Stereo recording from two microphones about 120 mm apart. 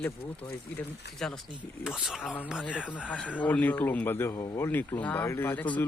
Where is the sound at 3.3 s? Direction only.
10° left (ahead or behind).